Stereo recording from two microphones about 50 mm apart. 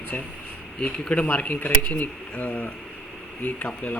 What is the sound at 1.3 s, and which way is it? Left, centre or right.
Speech, left.